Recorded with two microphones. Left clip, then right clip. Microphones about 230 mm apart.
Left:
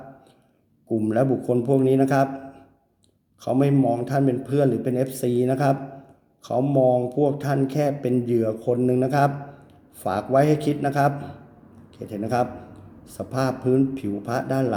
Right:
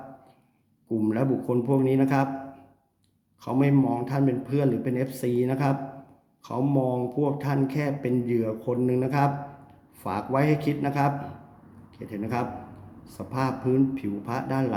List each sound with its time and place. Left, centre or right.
1.0 s speech: centre
3.4 s speech: centre